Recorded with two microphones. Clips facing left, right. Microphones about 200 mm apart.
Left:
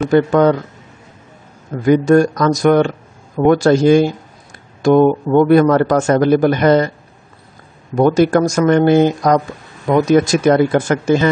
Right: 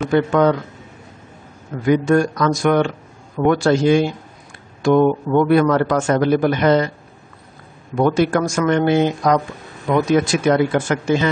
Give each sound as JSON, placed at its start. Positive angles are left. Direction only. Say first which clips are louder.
{"t": 0.1, "sound": "a man's voice", "louder": "left 3 dB", "side_deg": 40}
{"t": 1.9, "sound": "a man's voice", "louder": "left 4 dB", "side_deg": 40}
{"t": 7.9, "sound": "a man's voice", "louder": "left 4 dB", "side_deg": 40}